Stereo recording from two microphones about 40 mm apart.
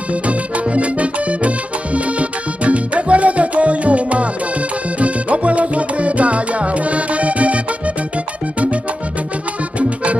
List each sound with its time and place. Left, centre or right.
0.3 s music: right